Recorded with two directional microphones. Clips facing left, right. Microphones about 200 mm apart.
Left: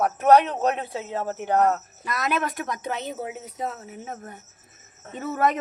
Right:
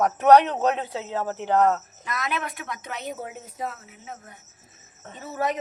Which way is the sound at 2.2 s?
45° left (ahead or behind).